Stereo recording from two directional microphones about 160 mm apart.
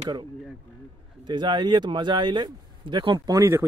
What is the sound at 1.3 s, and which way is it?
Speech, 30° right (ahead or behind).